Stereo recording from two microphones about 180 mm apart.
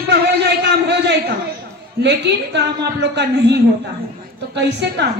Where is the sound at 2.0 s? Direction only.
70° right (ahead or behind).